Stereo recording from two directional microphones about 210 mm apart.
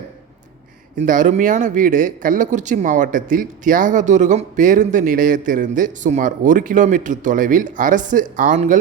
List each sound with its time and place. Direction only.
1.0 s speech: 40° right (ahead or behind)